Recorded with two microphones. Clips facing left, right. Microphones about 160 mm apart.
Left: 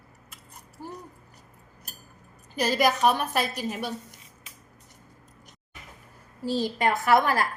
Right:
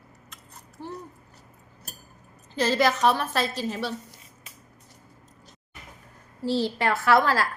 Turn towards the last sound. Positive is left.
turn(degrees=20)  # may be behind; listen again after turning